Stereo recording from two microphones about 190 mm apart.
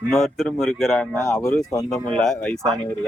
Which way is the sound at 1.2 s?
15° left (ahead or behind).